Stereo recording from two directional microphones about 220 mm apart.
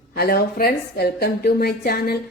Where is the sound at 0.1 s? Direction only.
45° left (ahead or behind).